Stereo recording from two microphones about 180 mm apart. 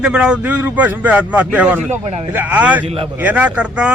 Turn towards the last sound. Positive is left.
turn(degrees=-5)  # may be behind; listen again after turning